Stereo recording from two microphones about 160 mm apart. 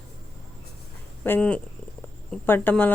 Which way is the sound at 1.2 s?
10° left (ahead or behind).